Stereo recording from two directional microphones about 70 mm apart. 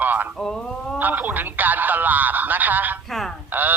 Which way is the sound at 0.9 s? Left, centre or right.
Right.